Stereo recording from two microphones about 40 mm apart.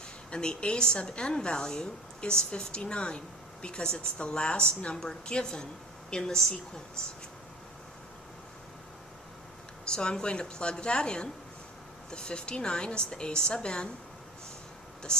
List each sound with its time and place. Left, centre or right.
0.3 s a woman's voice: left
9.9 s a woman's voice: left
15.1 s speech: left